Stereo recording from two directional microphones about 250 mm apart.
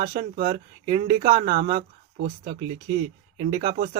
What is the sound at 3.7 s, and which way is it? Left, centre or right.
Speech, right.